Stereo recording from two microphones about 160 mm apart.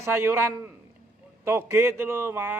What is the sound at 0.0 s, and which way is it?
A man's voice, 15° right (ahead or behind).